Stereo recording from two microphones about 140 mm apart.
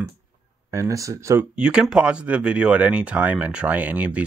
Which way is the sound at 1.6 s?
5° right (ahead or behind).